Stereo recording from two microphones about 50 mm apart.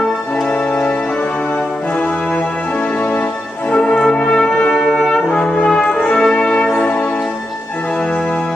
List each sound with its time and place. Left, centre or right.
3.7 s brass instrument: centre